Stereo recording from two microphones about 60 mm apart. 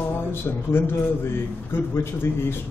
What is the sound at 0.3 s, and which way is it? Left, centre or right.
A man's voice, left.